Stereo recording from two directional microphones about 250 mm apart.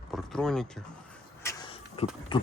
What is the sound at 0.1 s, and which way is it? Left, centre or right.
Speech, centre.